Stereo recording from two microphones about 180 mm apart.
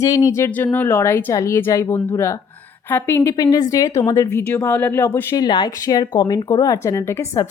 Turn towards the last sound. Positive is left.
turn(degrees=15)  # may be behind; listen again after turning